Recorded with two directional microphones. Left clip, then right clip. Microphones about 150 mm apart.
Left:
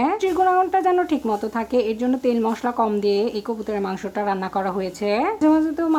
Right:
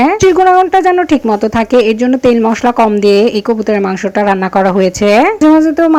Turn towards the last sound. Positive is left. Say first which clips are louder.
# right 11 dB
turn(degrees=-40)  # may be behind; listen again after turning